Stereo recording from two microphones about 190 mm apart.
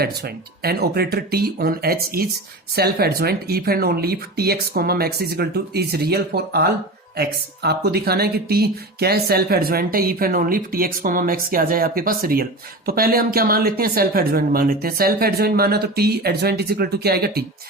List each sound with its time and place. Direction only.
0.0 s speech: 55° right (ahead or behind)